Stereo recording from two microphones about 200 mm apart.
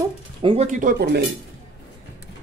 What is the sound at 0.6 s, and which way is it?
Speech, 40° right (ahead or behind).